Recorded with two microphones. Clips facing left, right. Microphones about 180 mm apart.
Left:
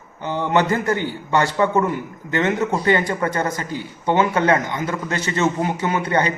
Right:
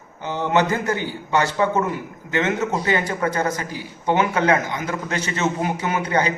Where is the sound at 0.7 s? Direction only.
10° right (ahead or behind).